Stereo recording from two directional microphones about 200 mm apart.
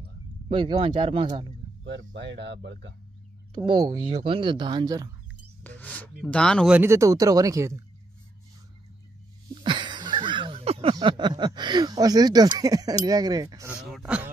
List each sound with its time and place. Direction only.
0.5 s speech: 25° right (ahead or behind)
1.9 s speech: 60° right (ahead or behind)
3.5 s speech: 25° right (ahead or behind)
5.6 s music: 10° left (ahead or behind)
6.1 s speech: 5° left (ahead or behind)
6.8 s speech: 15° right (ahead or behind)
9.5 s speech: 25° right (ahead or behind)
13.8 s a sound: 5° right (ahead or behind)